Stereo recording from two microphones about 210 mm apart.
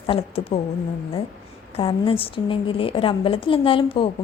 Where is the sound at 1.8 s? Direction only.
25° left (ahead or behind).